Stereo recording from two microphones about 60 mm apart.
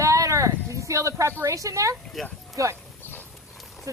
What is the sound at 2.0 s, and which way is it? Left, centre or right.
Speech, centre.